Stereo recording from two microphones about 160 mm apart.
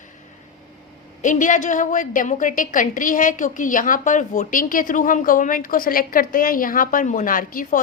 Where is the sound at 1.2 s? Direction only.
50° left (ahead or behind).